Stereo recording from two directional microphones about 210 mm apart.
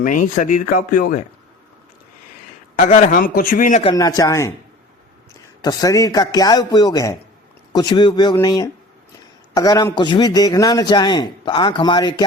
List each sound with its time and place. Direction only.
0.0 s speech: 35° left (ahead or behind)
2.7 s speech: 40° left (ahead or behind)
3.9 s a man's voice: 15° left (ahead or behind)
5.6 s a man's voice: 15° left (ahead or behind)